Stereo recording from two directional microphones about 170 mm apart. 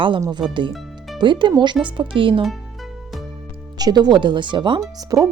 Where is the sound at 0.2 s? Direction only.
25° right (ahead or behind).